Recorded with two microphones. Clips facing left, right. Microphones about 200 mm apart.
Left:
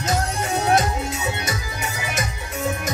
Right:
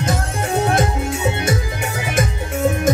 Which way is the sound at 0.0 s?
55° right (ahead or behind).